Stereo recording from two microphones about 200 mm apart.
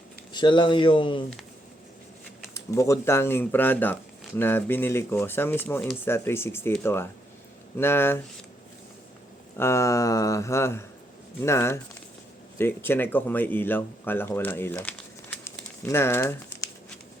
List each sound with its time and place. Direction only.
0.3 s speech: 25° left (ahead or behind)
2.6 s speech: 15° left (ahead or behind)
9.6 s speech: 15° left (ahead or behind)